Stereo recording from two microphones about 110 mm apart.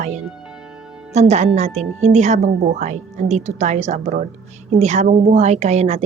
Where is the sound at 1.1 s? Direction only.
90° right.